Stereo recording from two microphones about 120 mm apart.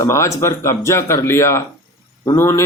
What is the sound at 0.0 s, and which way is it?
A man's voice, 25° left (ahead or behind).